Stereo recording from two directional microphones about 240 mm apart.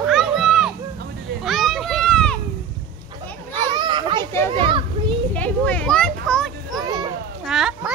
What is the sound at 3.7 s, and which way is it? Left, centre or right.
Children playing, centre.